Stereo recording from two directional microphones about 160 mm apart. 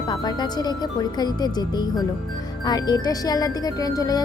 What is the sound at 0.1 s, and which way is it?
Speech, 25° left (ahead or behind).